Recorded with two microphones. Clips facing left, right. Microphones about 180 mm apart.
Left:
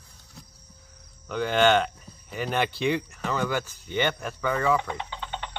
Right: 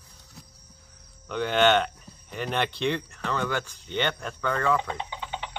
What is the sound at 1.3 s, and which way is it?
Speech, centre (ahead or behind).